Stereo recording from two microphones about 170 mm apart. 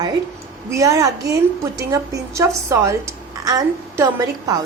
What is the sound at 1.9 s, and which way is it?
A woman's voice, 20° right (ahead or behind).